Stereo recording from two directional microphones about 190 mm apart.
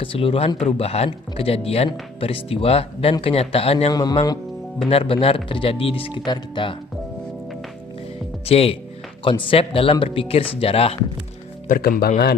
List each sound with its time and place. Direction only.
0.0 s speech: 30° left (ahead or behind)
8.4 s speech: 30° left (ahead or behind)
11.7 s speech: 50° left (ahead or behind)